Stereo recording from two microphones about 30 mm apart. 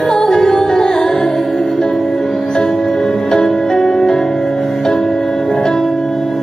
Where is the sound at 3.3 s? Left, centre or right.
Centre.